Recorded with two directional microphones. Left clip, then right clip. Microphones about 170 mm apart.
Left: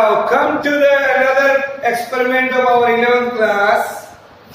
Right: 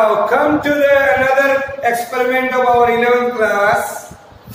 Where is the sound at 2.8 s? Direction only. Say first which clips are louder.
Right 1 dB; centre (ahead or behind).